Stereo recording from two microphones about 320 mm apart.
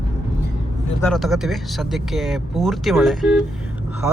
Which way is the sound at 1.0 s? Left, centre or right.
Centre.